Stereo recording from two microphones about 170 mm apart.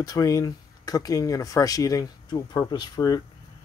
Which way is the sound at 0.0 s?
20° left (ahead or behind).